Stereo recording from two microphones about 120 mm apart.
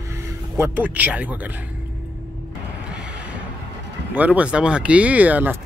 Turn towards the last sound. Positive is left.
turn(degrees=-15)  # may be behind; listen again after turning